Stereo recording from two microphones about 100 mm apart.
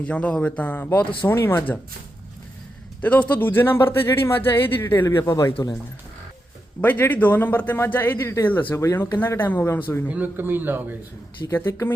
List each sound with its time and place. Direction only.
0.0 s speech: 10° left (ahead or behind)
3.0 s speech: 15° left (ahead or behind)
6.8 s speech: 20° left (ahead or behind)
10.1 s speech: 20° right (ahead or behind)
11.5 s speech: 25° left (ahead or behind)